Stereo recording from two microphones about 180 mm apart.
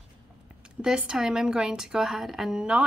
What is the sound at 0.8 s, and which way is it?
A woman's voice, 5° right (ahead or behind).